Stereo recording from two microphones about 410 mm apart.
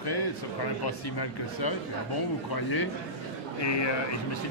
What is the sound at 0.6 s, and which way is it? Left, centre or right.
Speech, left.